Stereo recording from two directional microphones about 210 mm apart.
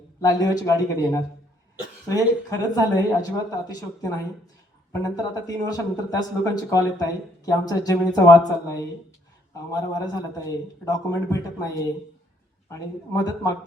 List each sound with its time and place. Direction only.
0.2 s speech: 15° left (ahead or behind)